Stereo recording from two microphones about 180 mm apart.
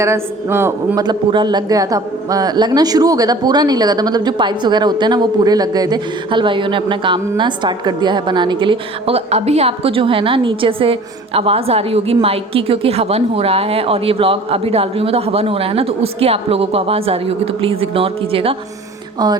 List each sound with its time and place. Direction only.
0.0 s a man's voice: 15° right (ahead or behind); by 18.5 s 30° right (ahead or behind)